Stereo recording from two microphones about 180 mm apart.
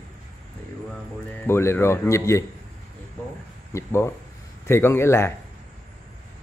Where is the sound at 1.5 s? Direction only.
15° left (ahead or behind).